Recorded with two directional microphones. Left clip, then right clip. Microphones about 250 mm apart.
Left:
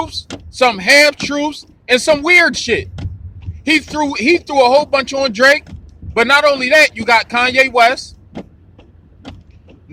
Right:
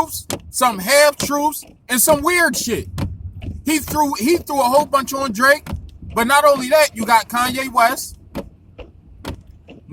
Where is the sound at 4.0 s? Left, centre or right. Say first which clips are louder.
Left 3 dB; right.